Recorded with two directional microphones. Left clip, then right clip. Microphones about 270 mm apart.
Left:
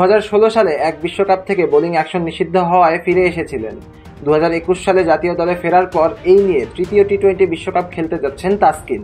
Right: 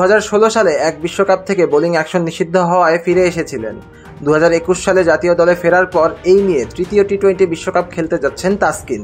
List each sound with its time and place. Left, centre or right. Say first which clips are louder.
0.0 s a man's voice: even; right